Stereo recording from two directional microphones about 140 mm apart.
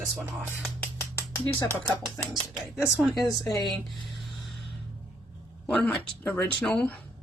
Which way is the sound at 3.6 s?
Centre (ahead or behind).